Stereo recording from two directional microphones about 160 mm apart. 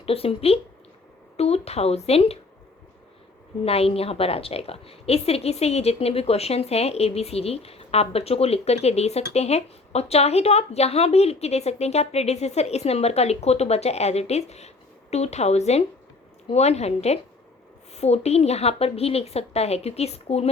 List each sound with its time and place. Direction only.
0.0 s a woman's voice: 35° left (ahead or behind)
3.6 s a woman's voice: 40° left (ahead or behind)